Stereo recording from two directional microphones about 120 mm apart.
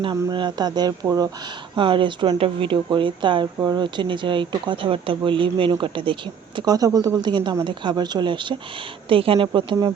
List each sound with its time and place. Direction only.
0.1 s speech: 35° right (ahead or behind)
1.7 s speech: 45° right (ahead or behind)
6.6 s speech: 30° right (ahead or behind); by 9.5 s 50° right (ahead or behind)
9.5 s speech: 40° right (ahead or behind)